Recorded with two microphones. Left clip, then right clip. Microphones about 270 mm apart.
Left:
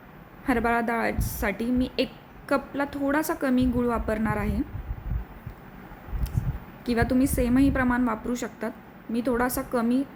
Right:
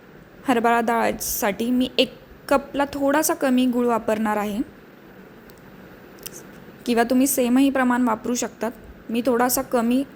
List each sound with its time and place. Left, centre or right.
0.4 s a woman's voice: centre
6.8 s a woman's voice: centre